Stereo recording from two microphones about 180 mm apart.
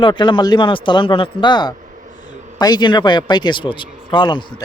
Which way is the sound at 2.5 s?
20° left (ahead or behind).